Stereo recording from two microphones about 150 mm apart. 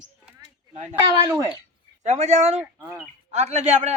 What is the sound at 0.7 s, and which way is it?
Speech, 50° right (ahead or behind).